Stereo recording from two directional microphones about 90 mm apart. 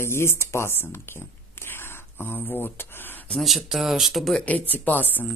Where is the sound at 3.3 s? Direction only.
Centre (ahead or behind).